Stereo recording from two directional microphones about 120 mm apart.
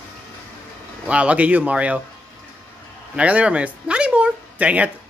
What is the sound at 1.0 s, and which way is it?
Speech, 10° right (ahead or behind).